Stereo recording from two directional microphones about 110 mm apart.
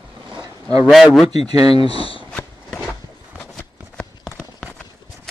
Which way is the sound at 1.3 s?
35° right (ahead or behind).